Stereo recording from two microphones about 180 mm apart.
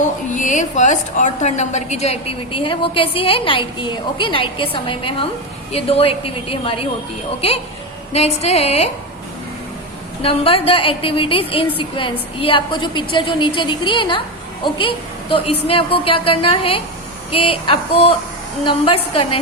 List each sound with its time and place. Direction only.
0.3 s a woman's voice: 45° left (ahead or behind)
10.2 s a woman's voice: 30° left (ahead or behind)